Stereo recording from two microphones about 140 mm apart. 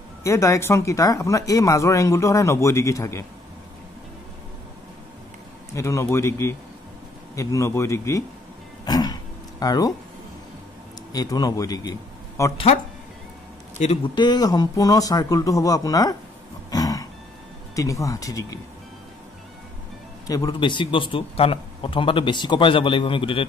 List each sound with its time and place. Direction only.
0.2 s speech: 20° left (ahead or behind)
5.7 s speech: 20° left (ahead or behind)
8.8 s a sound: 30° left (ahead or behind)
11.1 s speech: 30° left (ahead or behind)
14.1 s speech: 30° left (ahead or behind)
16.7 s a sound: 25° left (ahead or behind)
17.7 s speech: 25° left (ahead or behind)
20.2 s a man's voice: 25° left (ahead or behind)